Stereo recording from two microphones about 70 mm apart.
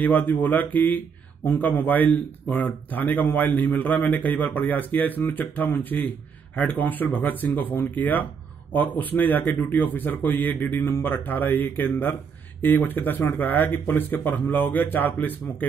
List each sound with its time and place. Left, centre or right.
0.0 s speech: left